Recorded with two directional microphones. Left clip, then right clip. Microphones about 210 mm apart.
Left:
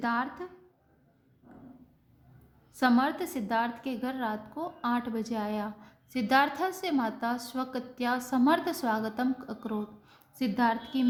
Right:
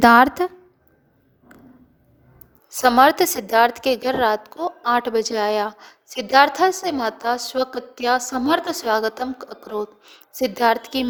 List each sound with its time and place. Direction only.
0.0 s a woman's voice: 55° right (ahead or behind)
2.7 s a woman's voice: 50° right (ahead or behind)